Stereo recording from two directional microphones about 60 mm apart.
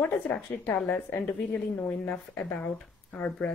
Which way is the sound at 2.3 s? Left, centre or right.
Left.